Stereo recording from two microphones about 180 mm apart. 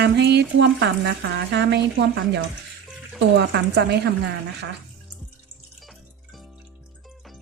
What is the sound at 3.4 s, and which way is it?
Speech, 70° right (ahead or behind).